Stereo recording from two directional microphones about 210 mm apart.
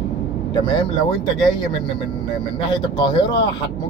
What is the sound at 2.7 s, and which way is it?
Speech, 20° left (ahead or behind).